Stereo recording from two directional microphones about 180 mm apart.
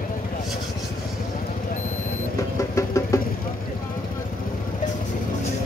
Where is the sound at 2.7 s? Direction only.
15° left (ahead or behind).